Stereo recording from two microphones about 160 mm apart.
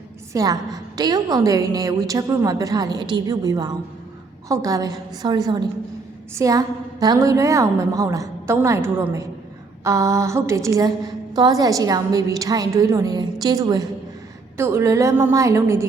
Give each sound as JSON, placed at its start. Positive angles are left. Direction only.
{"t": 0.3, "sound": "a woman's voice", "side_deg": -25}